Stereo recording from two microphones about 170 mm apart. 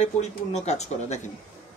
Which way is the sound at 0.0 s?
40° left (ahead or behind).